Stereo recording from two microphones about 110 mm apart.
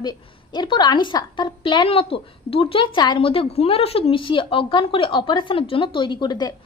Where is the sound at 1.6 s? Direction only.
55° left (ahead or behind).